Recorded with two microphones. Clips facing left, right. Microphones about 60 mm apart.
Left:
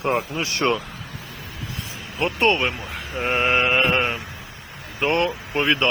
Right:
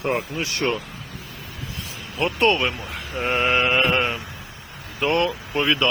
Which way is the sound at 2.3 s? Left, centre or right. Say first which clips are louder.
Even; left.